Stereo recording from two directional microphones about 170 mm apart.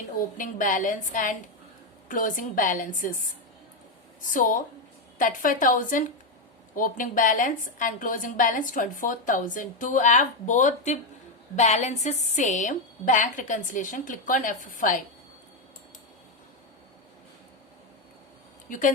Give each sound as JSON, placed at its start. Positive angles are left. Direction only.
{"t": 0.3, "sound": "a woman's voice", "side_deg": 50}
{"t": 4.3, "sound": "a woman's voice", "side_deg": 50}
{"t": 18.7, "sound": "a woman's voice", "side_deg": 50}